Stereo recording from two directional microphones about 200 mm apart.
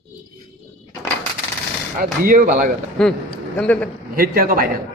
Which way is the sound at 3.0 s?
5° left (ahead or behind).